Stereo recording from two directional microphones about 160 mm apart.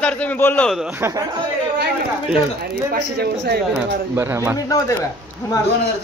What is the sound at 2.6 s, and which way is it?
Speech, 75° right (ahead or behind).